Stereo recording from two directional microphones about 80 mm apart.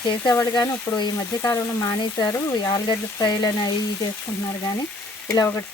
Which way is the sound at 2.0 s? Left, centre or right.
Left.